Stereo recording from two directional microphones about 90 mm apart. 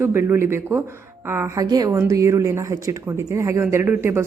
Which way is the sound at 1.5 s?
45° right (ahead or behind).